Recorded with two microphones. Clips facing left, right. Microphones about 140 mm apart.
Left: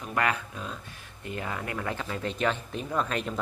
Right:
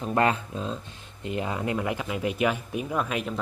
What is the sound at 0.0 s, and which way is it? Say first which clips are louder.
Speech: right 5 dB; 30° right (ahead or behind).